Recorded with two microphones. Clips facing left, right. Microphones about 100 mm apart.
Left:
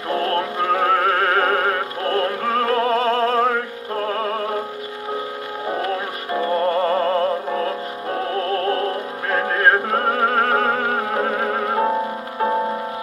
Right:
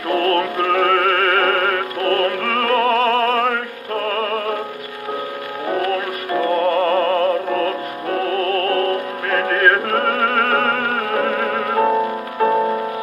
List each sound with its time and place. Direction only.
0.1 s music: 20° left (ahead or behind)
2.5 s opera: 50° right (ahead or behind)
3.9 s music: 20° left (ahead or behind)
5.8 s music: 25° left (ahead or behind)
10.9 s opera: 25° left (ahead or behind)
11.6 s music: 25° left (ahead or behind)